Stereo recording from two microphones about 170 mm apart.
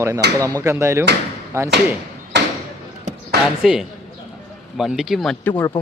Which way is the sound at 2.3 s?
90° right.